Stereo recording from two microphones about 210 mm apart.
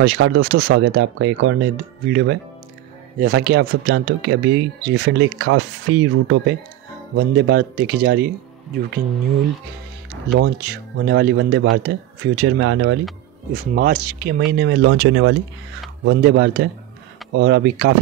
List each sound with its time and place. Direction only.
0.0 s speech: 55° right (ahead or behind)
5.5 s speech: 75° right (ahead or behind)
7.2 s speech: 50° right (ahead or behind)
10.6 s speech: 50° right (ahead or behind)
13.5 s speech: 40° right (ahead or behind); by 17.9 s 55° right (ahead or behind)